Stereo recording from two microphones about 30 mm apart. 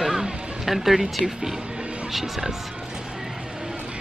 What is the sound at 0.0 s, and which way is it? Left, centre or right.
Music, centre.